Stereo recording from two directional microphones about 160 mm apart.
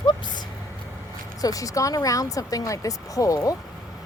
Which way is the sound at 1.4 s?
20° left (ahead or behind).